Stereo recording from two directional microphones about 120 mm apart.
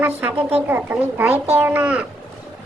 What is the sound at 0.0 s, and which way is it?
Speech, 15° right (ahead or behind).